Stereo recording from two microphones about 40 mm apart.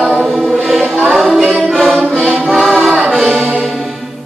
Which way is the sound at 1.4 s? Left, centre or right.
Left.